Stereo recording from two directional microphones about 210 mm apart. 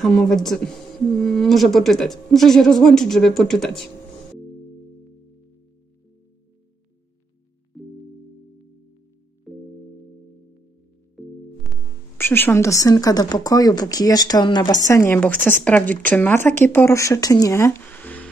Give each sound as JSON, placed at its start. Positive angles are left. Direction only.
{"t": 0.0, "sound": "speech", "side_deg": 5}
{"t": 9.5, "sound": "music", "side_deg": 0}
{"t": 12.2, "sound": "speech", "side_deg": 10}